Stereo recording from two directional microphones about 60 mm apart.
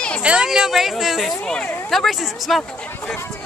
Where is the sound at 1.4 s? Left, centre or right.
Centre.